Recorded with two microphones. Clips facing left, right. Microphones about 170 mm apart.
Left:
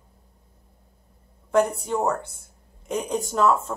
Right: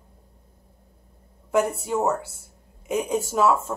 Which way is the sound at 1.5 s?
5° right (ahead or behind).